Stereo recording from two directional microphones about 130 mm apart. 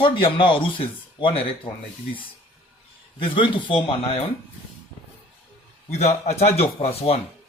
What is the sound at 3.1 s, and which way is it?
Speech, 40° left (ahead or behind).